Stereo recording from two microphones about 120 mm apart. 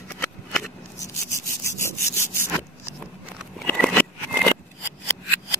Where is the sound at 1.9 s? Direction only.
20° left (ahead or behind).